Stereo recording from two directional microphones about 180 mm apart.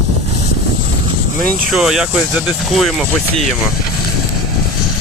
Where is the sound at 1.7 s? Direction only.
Centre (ahead or behind).